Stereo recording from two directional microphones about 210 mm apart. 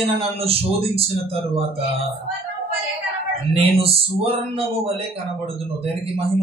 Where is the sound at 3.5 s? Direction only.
25° right (ahead or behind).